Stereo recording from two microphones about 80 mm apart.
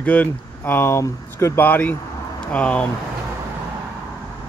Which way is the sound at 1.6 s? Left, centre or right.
Left.